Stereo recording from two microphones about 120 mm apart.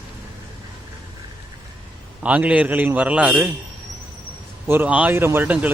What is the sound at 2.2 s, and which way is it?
A man's voice, 10° right (ahead or behind).